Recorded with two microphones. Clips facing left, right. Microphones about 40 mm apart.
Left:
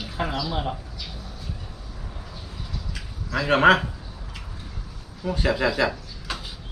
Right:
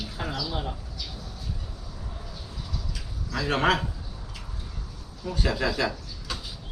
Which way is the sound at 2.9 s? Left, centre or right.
Left.